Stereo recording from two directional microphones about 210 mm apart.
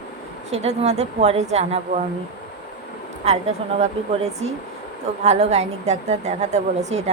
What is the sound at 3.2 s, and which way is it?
Speech, 30° right (ahead or behind).